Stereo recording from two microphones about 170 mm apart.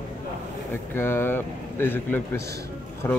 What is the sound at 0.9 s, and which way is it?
A man's voice, 10° left (ahead or behind).